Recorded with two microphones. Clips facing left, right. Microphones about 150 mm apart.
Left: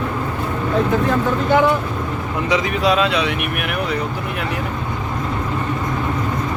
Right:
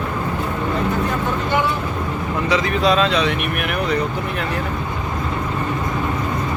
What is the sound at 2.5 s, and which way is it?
Speech, 10° left (ahead or behind).